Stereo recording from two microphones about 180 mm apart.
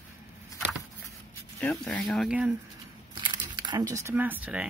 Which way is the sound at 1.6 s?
5° left (ahead or behind).